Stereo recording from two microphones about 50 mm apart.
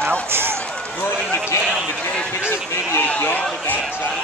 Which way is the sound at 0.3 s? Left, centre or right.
Right.